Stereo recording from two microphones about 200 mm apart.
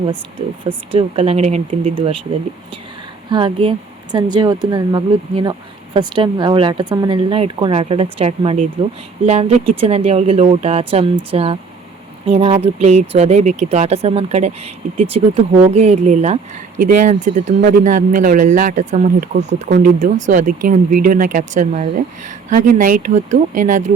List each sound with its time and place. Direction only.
0.9 s speech: 25° right (ahead or behind)
3.2 s speech: 25° right (ahead or behind); by 23.9 s 40° right (ahead or behind)